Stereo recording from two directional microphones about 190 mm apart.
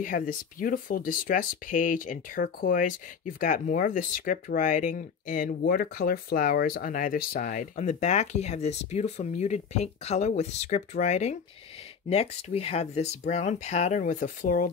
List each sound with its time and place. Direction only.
0.0 s speech: 45° left (ahead or behind)